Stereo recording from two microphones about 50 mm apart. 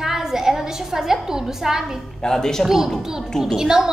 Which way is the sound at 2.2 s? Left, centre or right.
Centre.